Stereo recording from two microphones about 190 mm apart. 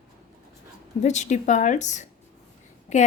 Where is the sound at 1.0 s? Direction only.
40° left (ahead or behind).